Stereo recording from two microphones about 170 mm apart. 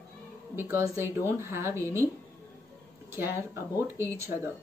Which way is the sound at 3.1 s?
15° right (ahead or behind).